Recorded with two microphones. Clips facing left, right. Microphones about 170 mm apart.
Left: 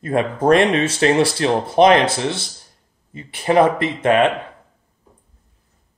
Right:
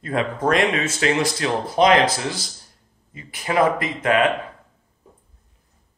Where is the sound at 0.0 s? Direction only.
25° left (ahead or behind).